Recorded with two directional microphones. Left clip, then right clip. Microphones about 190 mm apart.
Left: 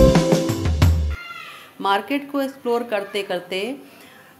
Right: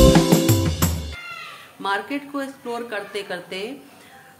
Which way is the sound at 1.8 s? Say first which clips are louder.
Left 4 dB; 30° left (ahead or behind).